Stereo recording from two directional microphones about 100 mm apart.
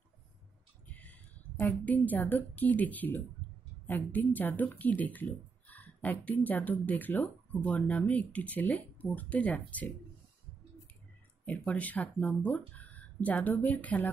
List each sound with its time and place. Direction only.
0.8 s a woman's voice: 15° left (ahead or behind)
11.4 s a woman's voice: 15° left (ahead or behind)